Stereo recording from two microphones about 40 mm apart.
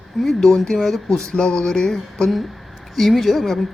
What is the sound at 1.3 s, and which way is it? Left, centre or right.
Music, centre.